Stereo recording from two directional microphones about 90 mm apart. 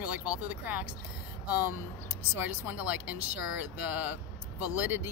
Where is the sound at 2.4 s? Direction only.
20° right (ahead or behind).